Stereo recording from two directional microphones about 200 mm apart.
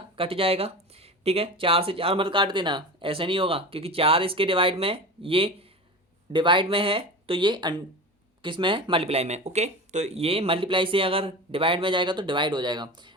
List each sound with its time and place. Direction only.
0.2 s speech: 30° right (ahead or behind)